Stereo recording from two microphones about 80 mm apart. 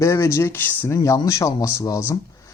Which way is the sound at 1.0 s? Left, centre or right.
Left.